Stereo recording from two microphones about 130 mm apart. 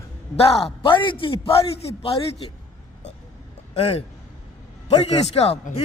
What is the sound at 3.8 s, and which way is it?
A man's voice, 50° left (ahead or behind).